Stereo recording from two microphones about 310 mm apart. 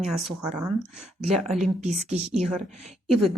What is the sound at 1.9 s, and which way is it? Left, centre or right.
Speech, right.